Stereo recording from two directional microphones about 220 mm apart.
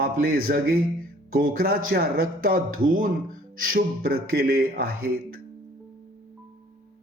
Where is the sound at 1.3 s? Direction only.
40° right (ahead or behind).